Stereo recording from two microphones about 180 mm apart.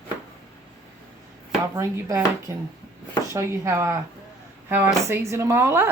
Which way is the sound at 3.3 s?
15° right (ahead or behind).